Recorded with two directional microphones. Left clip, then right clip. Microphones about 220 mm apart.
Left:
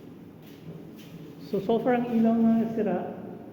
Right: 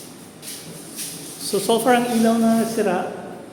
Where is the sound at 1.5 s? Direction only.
15° right (ahead or behind).